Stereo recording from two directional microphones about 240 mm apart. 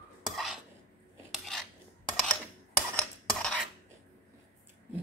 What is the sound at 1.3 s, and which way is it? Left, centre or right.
Cutlery, centre.